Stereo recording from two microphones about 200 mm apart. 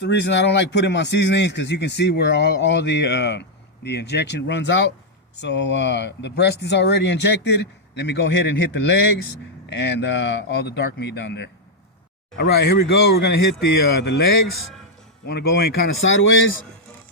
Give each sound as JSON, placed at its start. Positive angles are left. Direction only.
{"t": 0.0, "sound": "speech", "side_deg": 60}